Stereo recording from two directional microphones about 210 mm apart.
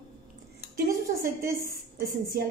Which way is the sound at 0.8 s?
45° right (ahead or behind).